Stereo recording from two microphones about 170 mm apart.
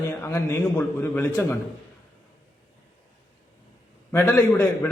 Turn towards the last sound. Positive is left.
turn(degrees=15)  # may be behind; listen again after turning